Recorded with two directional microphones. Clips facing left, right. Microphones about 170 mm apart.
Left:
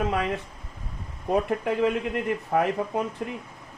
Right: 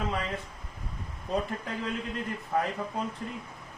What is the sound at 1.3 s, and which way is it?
Speech, 65° left (ahead or behind).